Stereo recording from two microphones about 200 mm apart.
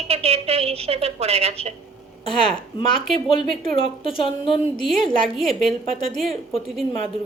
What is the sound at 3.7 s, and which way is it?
Speech, 25° left (ahead or behind).